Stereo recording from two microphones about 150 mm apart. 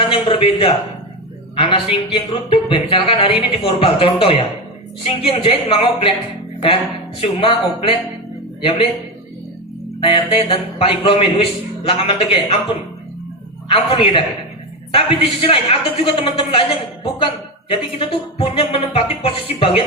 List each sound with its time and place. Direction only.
0.0 s a sound: 40° left (ahead or behind)
1.5 s speech: 35° left (ahead or behind)
7.2 s speech: 40° left (ahead or behind)
10.0 s speech: 35° left (ahead or behind)
13.7 s speech: 40° left (ahead or behind)